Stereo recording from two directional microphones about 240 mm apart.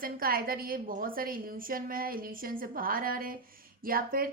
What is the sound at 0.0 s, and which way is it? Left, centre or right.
A woman's voice, right.